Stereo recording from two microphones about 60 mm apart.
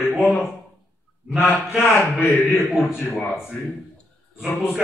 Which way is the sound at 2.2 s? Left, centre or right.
Left.